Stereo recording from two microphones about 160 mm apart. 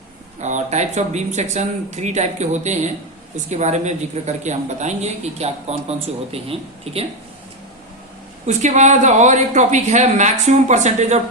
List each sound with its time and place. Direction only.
0.3 s a man's voice: 45° right (ahead or behind)
8.4 s speech: 45° right (ahead or behind)